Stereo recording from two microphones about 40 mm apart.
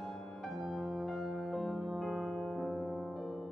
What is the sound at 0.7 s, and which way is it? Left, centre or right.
Music, centre.